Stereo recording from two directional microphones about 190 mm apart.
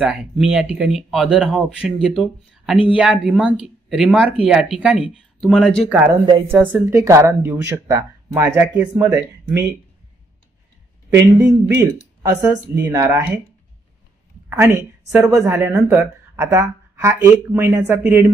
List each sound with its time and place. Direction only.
0.0 s speech: 5° right (ahead or behind)
6.2 s a woman's voice: 25° right (ahead or behind)
6.5 s speech: 10° right (ahead or behind)
11.1 s speech: 15° right (ahead or behind)
14.5 s speech: 15° right (ahead or behind)